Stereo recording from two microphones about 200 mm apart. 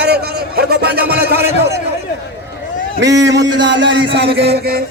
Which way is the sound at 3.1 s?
60° right (ahead or behind).